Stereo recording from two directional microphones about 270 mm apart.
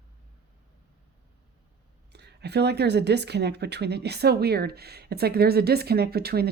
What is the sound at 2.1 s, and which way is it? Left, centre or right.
Speech, right.